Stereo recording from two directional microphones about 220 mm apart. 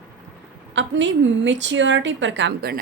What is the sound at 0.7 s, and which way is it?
A woman's voice, 55° right (ahead or behind).